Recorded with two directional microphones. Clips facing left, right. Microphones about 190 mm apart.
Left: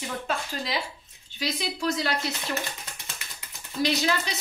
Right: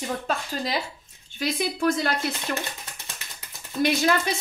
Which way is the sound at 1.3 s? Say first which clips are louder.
Right 4 dB; 50° right (ahead or behind).